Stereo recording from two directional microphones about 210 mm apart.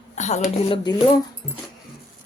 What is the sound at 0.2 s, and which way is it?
Speech, 35° left (ahead or behind).